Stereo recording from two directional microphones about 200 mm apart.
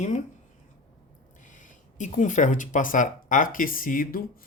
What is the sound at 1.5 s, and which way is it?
Speech, 40° left (ahead or behind).